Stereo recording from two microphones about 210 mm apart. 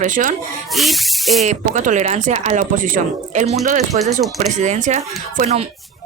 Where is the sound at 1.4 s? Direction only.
35° right (ahead or behind).